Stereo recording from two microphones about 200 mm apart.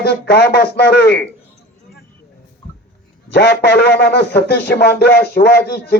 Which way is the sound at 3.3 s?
55° left (ahead or behind).